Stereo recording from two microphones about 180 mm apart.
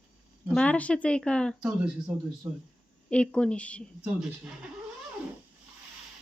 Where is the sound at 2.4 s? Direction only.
15° right (ahead or behind).